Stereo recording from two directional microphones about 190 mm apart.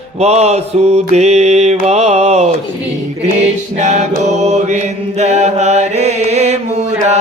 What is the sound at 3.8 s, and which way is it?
Mantra, 40° right (ahead or behind).